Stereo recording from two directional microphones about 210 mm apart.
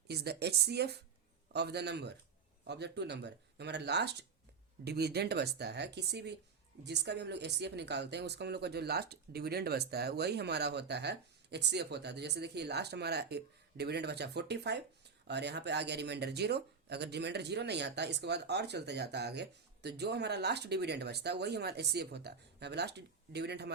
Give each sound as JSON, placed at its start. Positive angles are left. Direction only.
{"t": 0.1, "sound": "speech", "side_deg": -50}